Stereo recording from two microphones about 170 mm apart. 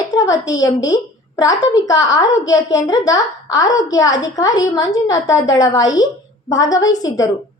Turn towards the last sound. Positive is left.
turn(degrees=20)  # may be behind; listen again after turning